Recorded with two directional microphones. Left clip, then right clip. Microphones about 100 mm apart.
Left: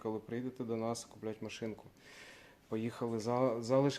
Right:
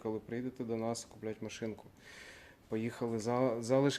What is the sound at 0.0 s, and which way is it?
Speech, 20° right (ahead or behind).